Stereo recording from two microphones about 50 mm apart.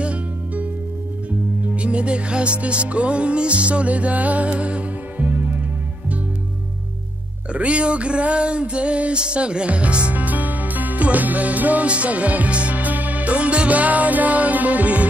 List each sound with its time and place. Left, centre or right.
0.0 s music: right
1.8 s music: right
7.5 s music: right